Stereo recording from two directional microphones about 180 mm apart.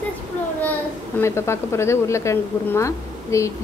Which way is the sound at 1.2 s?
15° left (ahead or behind).